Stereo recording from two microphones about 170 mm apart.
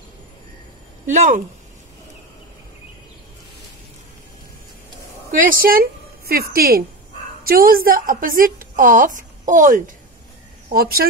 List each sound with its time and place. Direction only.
1.0 s speech: 50° right (ahead or behind)
5.4 s a woman's voice: 55° right (ahead or behind)
10.7 s a woman's voice: 60° right (ahead or behind)